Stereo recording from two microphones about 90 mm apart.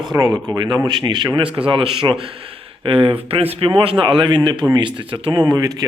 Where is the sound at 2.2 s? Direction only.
90° right.